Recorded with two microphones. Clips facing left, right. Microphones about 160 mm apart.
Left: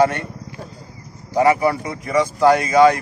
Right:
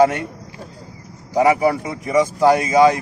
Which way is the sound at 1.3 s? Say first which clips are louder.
Right 1 dB; 15° right (ahead or behind).